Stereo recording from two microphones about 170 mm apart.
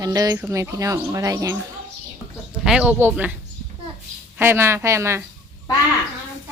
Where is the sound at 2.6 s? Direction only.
5° right (ahead or behind).